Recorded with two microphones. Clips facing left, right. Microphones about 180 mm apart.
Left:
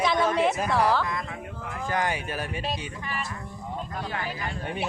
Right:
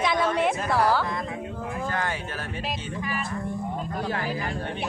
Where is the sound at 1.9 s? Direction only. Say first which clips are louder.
Left 4 dB; 15° left (ahead or behind).